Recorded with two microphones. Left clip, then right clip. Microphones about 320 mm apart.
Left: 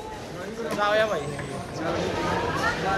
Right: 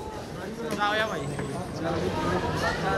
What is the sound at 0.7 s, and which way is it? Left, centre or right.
Speech, centre.